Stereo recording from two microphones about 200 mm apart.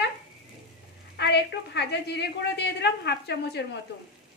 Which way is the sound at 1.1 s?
55° left (ahead or behind).